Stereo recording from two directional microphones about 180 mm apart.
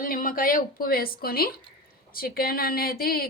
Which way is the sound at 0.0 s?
50° left (ahead or behind).